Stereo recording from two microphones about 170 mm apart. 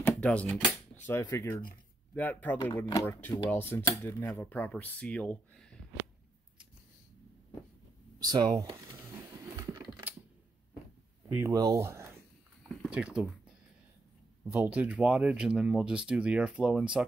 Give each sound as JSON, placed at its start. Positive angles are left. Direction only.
{"t": 0.2, "sound": "speech", "side_deg": 5}
{"t": 8.2, "sound": "speech", "side_deg": -25}
{"t": 11.3, "sound": "speech", "side_deg": -20}
{"t": 12.6, "sound": "a sound", "side_deg": -5}
{"t": 14.4, "sound": "speech", "side_deg": -10}